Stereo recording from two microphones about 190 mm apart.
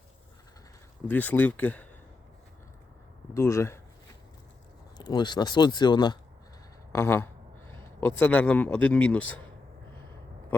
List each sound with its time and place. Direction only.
1.0 s speech: 10° left (ahead or behind)
3.3 s speech: 15° left (ahead or behind)
4.9 s speech: 20° left (ahead or behind)
6.9 s speech: 15° left (ahead or behind)